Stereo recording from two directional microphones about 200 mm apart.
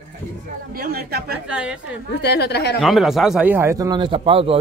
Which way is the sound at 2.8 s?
Centre (ahead or behind).